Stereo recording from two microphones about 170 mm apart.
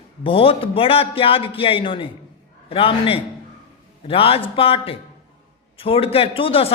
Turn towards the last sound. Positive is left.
turn(degrees=35)  # may be behind; listen again after turning